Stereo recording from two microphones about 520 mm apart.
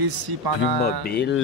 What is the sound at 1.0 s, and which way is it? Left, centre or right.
Speech, centre.